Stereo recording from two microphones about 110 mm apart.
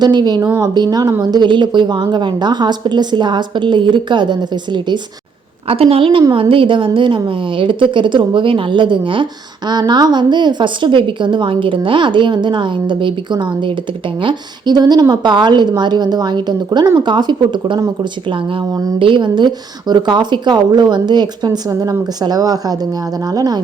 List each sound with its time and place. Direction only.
0.0 s a woman's voice: 40° right (ahead or behind)
5.6 s a woman's voice: 60° right (ahead or behind); by 17.8 s 45° right (ahead or behind)
18.9 s a woman's voice: 50° right (ahead or behind)